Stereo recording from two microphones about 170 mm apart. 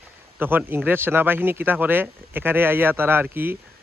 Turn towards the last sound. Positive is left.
turn(degrees=-10)  # may be behind; listen again after turning